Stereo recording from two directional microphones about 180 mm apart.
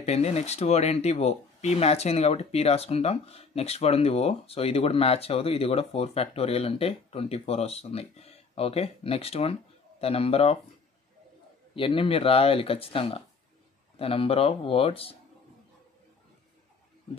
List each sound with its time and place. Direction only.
0.0 s speech: 35° left (ahead or behind)
11.7 s speech: 30° left (ahead or behind)